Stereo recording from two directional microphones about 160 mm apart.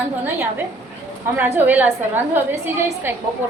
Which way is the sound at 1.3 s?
10° right (ahead or behind).